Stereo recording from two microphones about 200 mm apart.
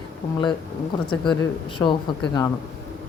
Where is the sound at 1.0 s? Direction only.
5° left (ahead or behind).